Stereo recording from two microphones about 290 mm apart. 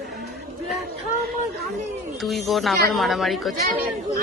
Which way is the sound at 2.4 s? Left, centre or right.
Centre.